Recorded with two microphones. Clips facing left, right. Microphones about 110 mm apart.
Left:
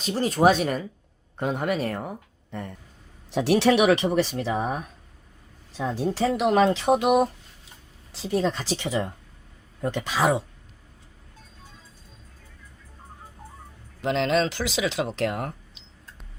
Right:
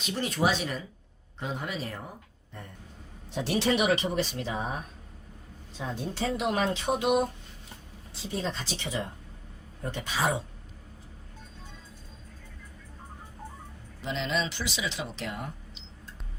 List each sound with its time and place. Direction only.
0.0 s speech: 35° left (ahead or behind); by 2.6 s 70° left (ahead or behind)
3.3 s speech: 85° left; by 4.5 s 70° left (ahead or behind)
5.7 s speech: 90° left
14.0 s speech: 90° left